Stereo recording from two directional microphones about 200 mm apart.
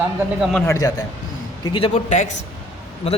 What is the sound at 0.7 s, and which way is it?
A man's voice, 20° left (ahead or behind).